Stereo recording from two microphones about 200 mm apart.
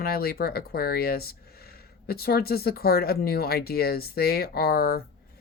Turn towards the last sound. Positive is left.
turn(degrees=50)  # may be behind; listen again after turning